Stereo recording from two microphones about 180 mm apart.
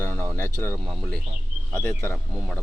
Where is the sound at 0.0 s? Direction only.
15° left (ahead or behind).